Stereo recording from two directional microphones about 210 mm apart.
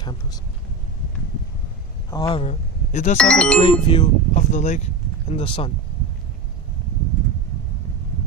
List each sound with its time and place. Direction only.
0.0 s a sound: 20° left (ahead or behind)
2.0 s speech: 20° left (ahead or behind)
2.4 s speech: 35° left (ahead or behind)
3.2 s speech: 5° left (ahead or behind)
3.6 s speech: 25° left (ahead or behind)